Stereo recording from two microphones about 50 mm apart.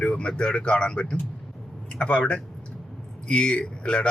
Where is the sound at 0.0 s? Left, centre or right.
Left.